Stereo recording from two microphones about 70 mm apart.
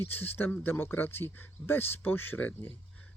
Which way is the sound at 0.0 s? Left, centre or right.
Left.